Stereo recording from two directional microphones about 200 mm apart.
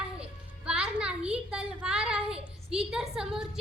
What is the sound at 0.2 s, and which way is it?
Music, 5° right (ahead or behind).